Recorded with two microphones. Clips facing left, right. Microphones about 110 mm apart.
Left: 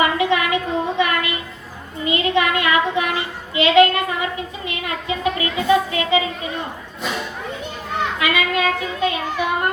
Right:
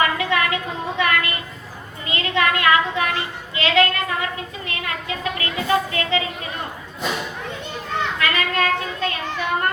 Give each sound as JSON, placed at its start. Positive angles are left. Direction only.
{"t": 0.0, "sound": "a sound", "side_deg": 20}
{"t": 2.0, "sound": "a woman's voice", "side_deg": 20}
{"t": 7.9, "sound": "children playing", "side_deg": 15}